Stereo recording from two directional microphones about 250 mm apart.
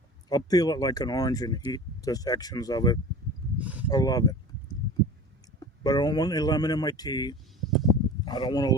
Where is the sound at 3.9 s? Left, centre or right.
Centre.